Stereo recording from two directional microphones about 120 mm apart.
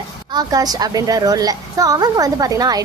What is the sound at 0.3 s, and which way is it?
A woman's voice, 35° right (ahead or behind).